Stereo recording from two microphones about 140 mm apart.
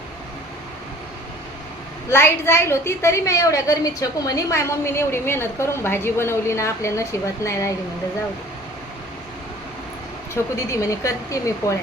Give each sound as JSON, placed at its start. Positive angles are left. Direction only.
{"t": 2.0, "sound": "a woman's voice", "side_deg": 15}
{"t": 10.3, "sound": "a woman's voice", "side_deg": 20}